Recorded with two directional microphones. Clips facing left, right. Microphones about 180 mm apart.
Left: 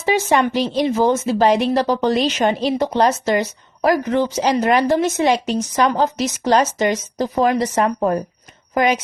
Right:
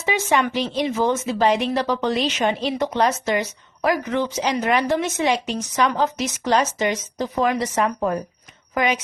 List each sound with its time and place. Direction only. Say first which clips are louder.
0.0 s a woman's voice: left 4 dB; 35° left (ahead or behind)